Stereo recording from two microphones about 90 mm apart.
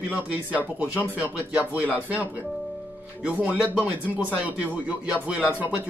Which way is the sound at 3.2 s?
15° right (ahead or behind).